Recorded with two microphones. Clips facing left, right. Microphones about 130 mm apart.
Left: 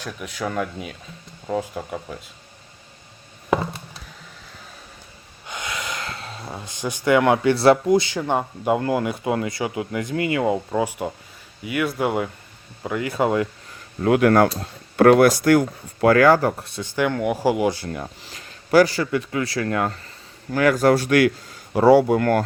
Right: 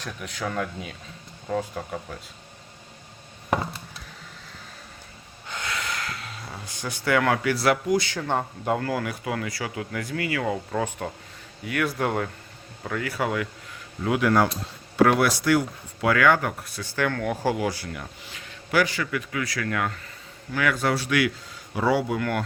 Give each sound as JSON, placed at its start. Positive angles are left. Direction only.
{"t": 0.0, "sound": "speech", "side_deg": 5}
{"t": 5.5, "sound": "speech", "side_deg": 15}
{"t": 12.8, "sound": "speech", "side_deg": 20}
{"t": 14.0, "sound": "speech", "side_deg": 55}
{"t": 17.8, "sound": "a man's voice", "side_deg": 35}